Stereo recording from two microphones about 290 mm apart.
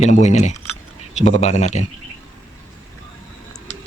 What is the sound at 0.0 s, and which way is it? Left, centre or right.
Speech, left.